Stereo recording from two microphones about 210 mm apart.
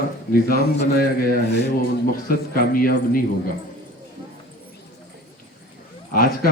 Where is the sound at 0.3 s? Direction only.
45° left (ahead or behind).